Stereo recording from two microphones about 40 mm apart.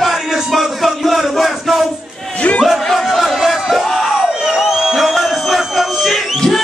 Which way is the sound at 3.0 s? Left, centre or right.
Centre.